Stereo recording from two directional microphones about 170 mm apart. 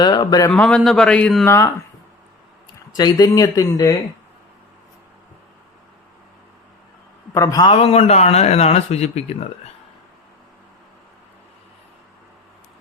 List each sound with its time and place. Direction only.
0.0 s speech: 25° left (ahead or behind)
0.5 s speech: 5° left (ahead or behind)
1.5 s speech: 15° left (ahead or behind)
2.9 s speech: 20° left (ahead or behind)
7.3 s speech: 20° left (ahead or behind)
7.7 s speech: 35° left (ahead or behind)